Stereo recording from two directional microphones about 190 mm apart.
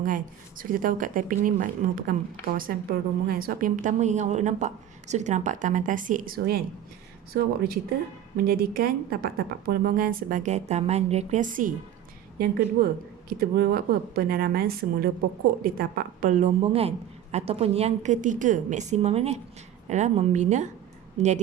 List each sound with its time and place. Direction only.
0.0 s a woman's voice: 45° right (ahead or behind)